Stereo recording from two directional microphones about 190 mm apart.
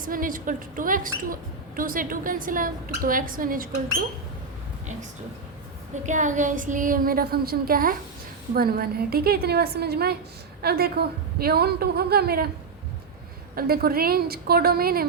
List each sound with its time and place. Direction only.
0.0 s a woman's voice: 45° right (ahead or behind)
6.1 s a woman's voice: 40° right (ahead or behind)
13.6 s a woman's voice: 50° right (ahead or behind)